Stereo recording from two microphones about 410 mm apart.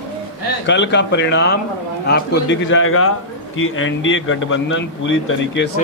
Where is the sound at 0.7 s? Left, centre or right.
Left.